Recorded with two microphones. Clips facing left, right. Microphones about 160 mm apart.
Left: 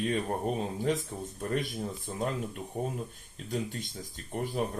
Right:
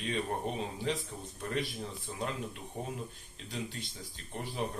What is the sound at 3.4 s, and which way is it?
Speech, 45° left (ahead or behind).